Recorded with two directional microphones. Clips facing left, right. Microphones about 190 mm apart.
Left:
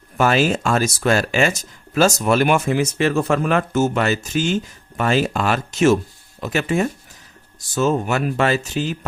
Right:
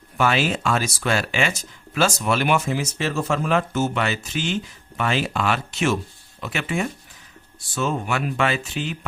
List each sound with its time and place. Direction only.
0.2 s speech: 40° left (ahead or behind)